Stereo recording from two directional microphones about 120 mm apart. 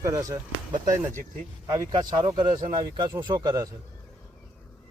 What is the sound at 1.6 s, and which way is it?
Speech, 35° right (ahead or behind).